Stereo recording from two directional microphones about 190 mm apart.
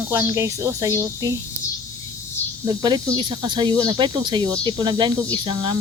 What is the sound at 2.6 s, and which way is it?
Speech, 20° right (ahead or behind).